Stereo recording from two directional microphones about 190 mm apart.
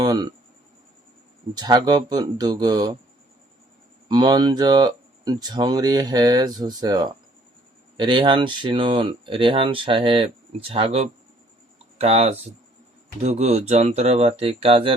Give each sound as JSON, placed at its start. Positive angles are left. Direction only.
{"t": 0.0, "sound": "speech", "side_deg": -20}
{"t": 1.5, "sound": "speech", "side_deg": -20}
{"t": 4.1, "sound": "speech", "side_deg": -20}